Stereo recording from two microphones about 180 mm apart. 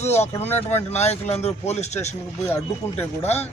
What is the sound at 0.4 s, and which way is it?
Speech, 10° left (ahead or behind).